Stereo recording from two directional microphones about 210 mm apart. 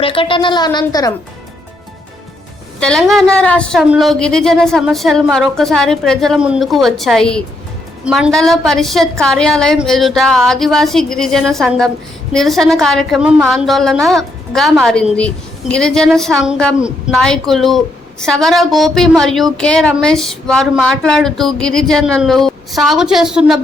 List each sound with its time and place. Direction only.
0.0 s a woman's voice: 25° left (ahead or behind)
2.8 s a woman's voice: centre (ahead or behind)